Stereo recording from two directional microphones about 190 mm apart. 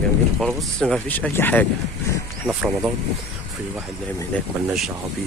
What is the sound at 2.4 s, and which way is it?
Speech, 5° right (ahead or behind).